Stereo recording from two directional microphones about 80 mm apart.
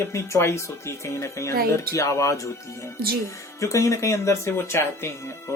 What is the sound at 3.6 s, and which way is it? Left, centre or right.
Speech, left.